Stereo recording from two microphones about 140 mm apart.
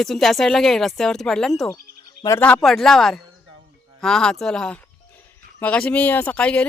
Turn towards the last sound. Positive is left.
turn(degrees=10)  # may be behind; listen again after turning